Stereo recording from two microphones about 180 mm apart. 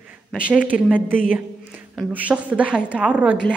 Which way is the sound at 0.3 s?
5° right (ahead or behind).